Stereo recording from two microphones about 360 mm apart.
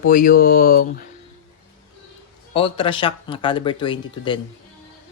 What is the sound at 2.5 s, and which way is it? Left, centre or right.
Speech, centre.